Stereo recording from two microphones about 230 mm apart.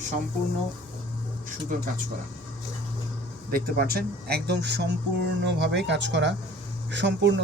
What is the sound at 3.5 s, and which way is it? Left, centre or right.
Speech, right.